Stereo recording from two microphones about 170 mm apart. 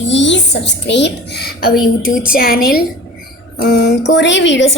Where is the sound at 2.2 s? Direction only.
55° left (ahead or behind).